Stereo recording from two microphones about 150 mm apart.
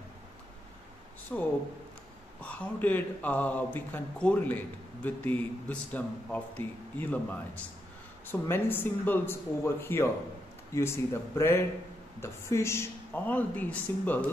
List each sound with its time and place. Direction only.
1.3 s speech: 5° left (ahead or behind)